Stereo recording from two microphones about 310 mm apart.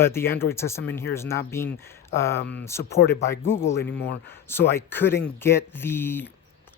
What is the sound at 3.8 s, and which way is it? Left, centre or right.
Speech, left.